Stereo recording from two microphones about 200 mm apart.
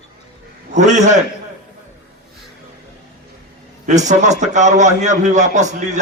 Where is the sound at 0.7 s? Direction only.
35° right (ahead or behind).